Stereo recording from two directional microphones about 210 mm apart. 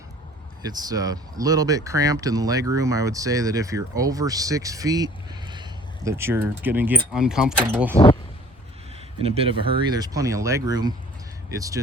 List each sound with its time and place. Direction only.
0.7 s speech: 20° right (ahead or behind)
9.2 s speech: 30° right (ahead or behind)